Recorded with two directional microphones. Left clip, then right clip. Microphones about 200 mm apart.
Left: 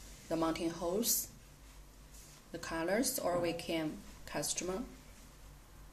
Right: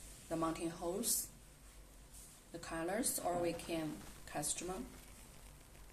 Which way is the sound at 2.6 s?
35° left (ahead or behind).